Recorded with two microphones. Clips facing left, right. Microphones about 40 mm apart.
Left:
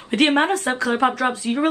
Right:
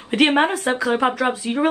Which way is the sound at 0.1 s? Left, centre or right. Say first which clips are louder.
Right 1 dB; centre.